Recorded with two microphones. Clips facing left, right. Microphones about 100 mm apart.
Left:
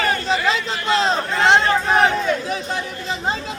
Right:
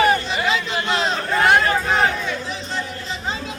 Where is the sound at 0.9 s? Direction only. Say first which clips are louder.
Left 2 dB; 30° left (ahead or behind).